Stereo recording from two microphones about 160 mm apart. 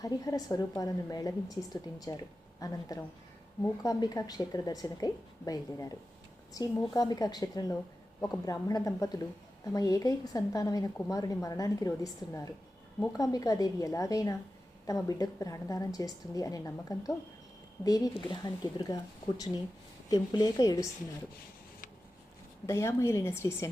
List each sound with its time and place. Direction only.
0.0 s a woman's voice: 25° left (ahead or behind)
22.6 s a woman's voice: 15° left (ahead or behind)